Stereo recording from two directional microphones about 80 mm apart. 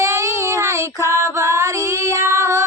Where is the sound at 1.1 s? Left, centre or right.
Right.